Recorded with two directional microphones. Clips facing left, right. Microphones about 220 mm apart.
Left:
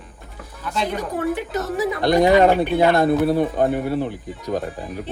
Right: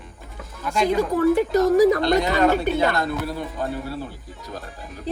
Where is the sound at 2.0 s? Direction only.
50° left (ahead or behind).